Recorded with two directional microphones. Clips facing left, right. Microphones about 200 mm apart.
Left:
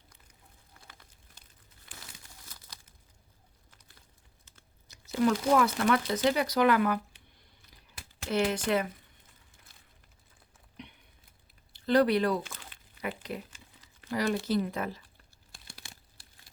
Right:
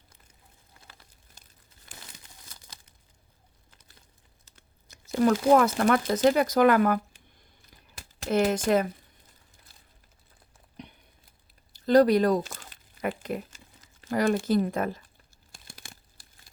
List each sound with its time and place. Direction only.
1.9 s crumpling: 45° right (ahead or behind)
4.9 s speech: 45° right (ahead or behind)
7.7 s crumpling: 45° right (ahead or behind)
10.8 s a sound: 40° right (ahead or behind)
13.2 s crumpling: 50° right (ahead or behind)
14.1 s speech: 50° right (ahead or behind)
15.5 s crumpling: 50° right (ahead or behind)